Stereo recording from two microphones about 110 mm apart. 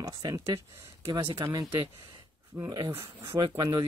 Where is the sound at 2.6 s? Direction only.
35° right (ahead or behind).